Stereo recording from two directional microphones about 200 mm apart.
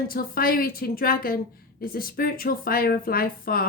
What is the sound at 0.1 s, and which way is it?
A woman's voice, 45° left (ahead or behind).